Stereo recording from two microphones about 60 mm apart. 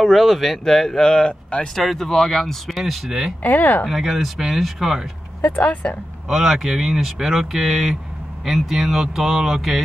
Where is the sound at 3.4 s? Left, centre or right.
Left.